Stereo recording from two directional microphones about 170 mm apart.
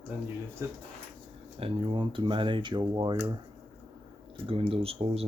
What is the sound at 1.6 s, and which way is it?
Speech, 30° right (ahead or behind).